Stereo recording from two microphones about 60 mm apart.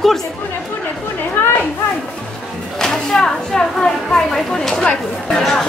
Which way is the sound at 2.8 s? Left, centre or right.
Centre.